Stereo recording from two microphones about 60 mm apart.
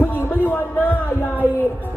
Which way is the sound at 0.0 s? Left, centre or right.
Left.